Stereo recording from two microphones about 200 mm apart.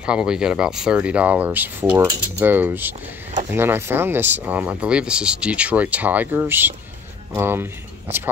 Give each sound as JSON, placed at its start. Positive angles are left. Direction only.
{"t": 0.0, "sound": "speech", "side_deg": -5}